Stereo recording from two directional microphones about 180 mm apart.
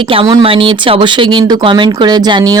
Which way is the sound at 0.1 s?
30° right (ahead or behind).